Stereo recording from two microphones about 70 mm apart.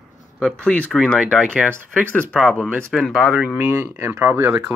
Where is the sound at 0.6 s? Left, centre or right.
Centre.